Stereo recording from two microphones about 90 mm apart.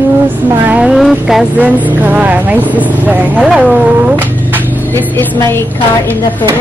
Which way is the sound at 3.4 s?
5° right (ahead or behind).